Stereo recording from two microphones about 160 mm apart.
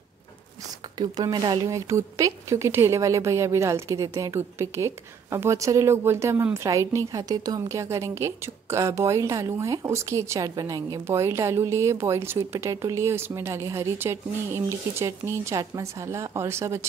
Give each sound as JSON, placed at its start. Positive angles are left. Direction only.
{"t": 0.9, "sound": "speech", "side_deg": -25}